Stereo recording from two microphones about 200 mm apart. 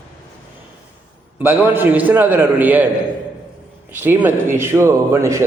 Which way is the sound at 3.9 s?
10° right (ahead or behind).